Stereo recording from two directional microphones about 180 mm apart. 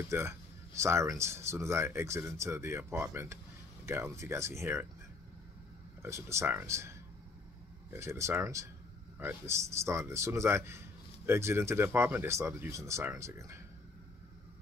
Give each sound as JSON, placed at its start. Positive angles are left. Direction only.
{"t": 0.1, "sound": "speech", "side_deg": -15}
{"t": 6.0, "sound": "speech", "side_deg": -15}